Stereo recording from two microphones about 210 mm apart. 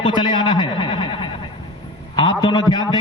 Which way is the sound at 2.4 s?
20° left (ahead or behind).